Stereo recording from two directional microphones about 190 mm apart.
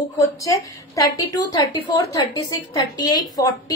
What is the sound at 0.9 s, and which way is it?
A woman's voice, 20° left (ahead or behind).